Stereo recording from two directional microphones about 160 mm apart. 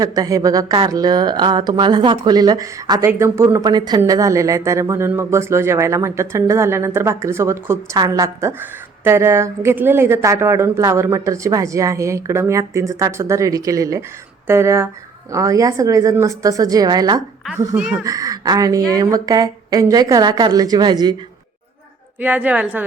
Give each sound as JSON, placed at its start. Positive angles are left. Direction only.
{"t": 0.0, "sound": "speech", "side_deg": -25}
{"t": 17.7, "sound": "speech", "side_deg": -5}
{"t": 18.0, "sound": "speech", "side_deg": -20}
{"t": 22.2, "sound": "speech", "side_deg": -10}